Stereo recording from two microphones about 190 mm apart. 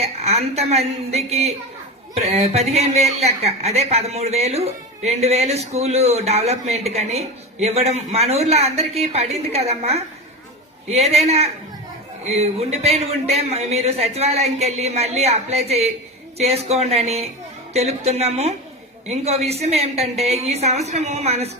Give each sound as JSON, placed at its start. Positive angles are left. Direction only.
{"t": 0.0, "sound": "a woman's voice", "side_deg": -35}